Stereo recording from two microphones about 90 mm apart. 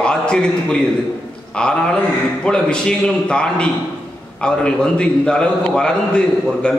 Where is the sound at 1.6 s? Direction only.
10° left (ahead or behind).